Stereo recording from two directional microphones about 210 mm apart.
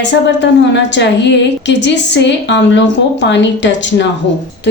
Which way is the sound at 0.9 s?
55° left (ahead or behind).